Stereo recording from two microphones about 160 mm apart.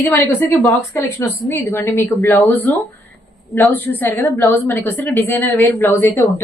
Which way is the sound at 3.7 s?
10° left (ahead or behind).